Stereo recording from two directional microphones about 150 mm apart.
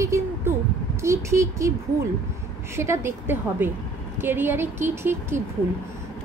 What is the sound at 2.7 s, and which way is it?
A woman's voice, 15° right (ahead or behind).